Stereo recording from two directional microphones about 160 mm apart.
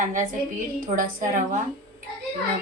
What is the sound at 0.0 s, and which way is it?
A woman's voice, 60° right (ahead or behind).